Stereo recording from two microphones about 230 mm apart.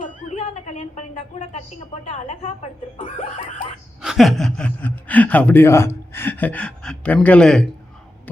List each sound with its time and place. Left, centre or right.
0.0 s a sound: left
2.0 s chuckle: left
4.0 s speech: centre